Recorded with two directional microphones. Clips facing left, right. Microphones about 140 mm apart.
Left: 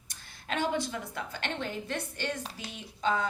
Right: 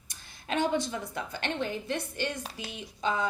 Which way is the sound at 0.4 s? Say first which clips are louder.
Right 2 dB; 20° right (ahead or behind).